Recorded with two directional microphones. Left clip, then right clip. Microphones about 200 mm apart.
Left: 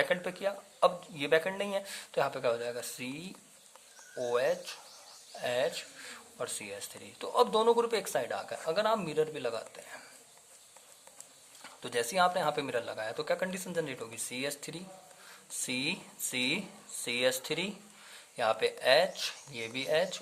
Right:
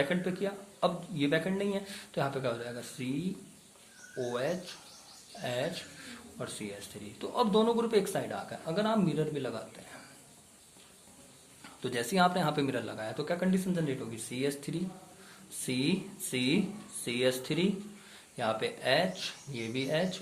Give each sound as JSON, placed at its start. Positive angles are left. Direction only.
{"t": 0.0, "sound": "speech", "side_deg": 40}
{"t": 11.6, "sound": "speech", "side_deg": 35}